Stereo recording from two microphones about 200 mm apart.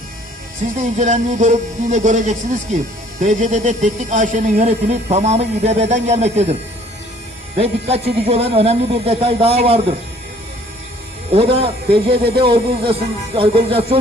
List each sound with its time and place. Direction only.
0.8 s speech: 35° right (ahead or behind)
11.3 s speech: 30° right (ahead or behind)